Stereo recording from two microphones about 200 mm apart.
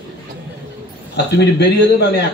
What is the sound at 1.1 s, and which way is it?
A man's voice, 55° left (ahead or behind).